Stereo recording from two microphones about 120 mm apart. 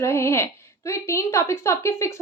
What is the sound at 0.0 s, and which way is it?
A woman's voice, 20° left (ahead or behind).